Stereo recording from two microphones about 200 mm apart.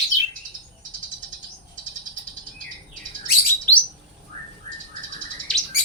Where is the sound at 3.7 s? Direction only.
5° left (ahead or behind).